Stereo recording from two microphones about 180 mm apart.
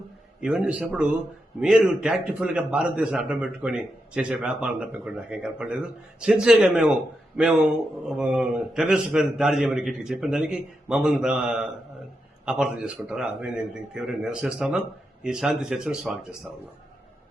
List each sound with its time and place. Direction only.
0.4 s a man's voice: 5° right (ahead or behind)